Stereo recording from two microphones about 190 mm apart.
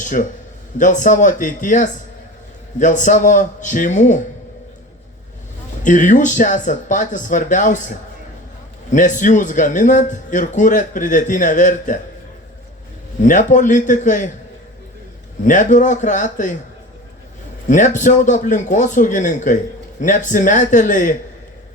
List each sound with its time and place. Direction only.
0.0 s a man's voice: 45° left (ahead or behind)
5.8 s a man's voice: 40° left (ahead or behind)
8.9 s a man's voice: 40° left (ahead or behind)
13.2 s a man's voice: 40° left (ahead or behind)
15.4 s a man's voice: 40° left (ahead or behind)
17.7 s a man's voice: 40° left (ahead or behind)